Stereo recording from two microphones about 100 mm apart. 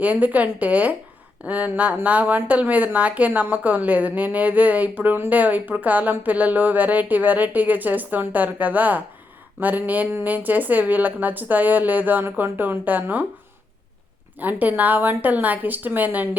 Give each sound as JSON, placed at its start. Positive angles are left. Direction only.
{"t": 0.0, "sound": "a woman's voice", "side_deg": -15}
{"t": 14.3, "sound": "a woman's voice", "side_deg": -15}